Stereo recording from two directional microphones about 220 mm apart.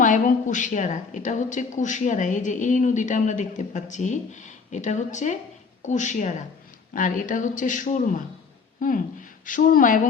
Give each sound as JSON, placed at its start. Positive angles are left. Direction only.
{"t": 0.0, "sound": "a woman's voice", "side_deg": 35}
{"t": 9.5, "sound": "a woman's voice", "side_deg": 35}